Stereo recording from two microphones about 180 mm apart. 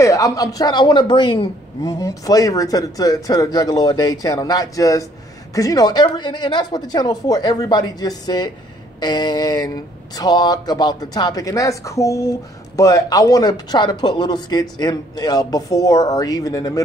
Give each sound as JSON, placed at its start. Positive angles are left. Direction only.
{"t": 0.0, "sound": "speech", "side_deg": 15}